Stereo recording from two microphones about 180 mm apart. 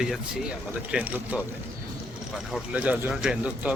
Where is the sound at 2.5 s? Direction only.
10° right (ahead or behind).